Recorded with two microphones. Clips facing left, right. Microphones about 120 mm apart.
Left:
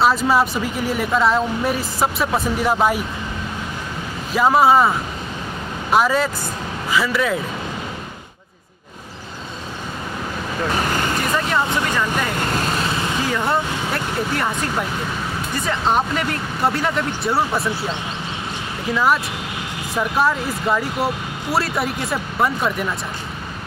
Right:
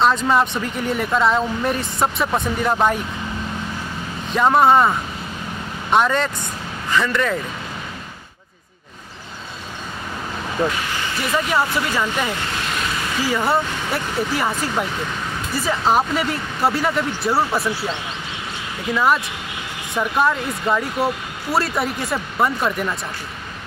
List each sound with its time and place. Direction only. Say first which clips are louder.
0.0 s speech: even; 5° left (ahead or behind)
4.3 s speech: even; 5° left (ahead or behind)
10.7 s vehicle: left 5 dB; 45° left (ahead or behind)
11.3 s speech: right 3 dB; 5° right (ahead or behind)
12.4 s vehicle: left 4 dB; 45° left (ahead or behind)
13.2 s speech: right 3 dB; 5° right (ahead or behind)